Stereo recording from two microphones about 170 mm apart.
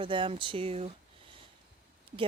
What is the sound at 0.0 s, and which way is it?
Speech, 30° right (ahead or behind).